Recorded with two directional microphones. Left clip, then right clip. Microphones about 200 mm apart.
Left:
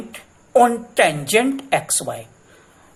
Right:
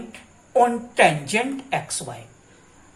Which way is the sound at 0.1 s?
50° left (ahead or behind).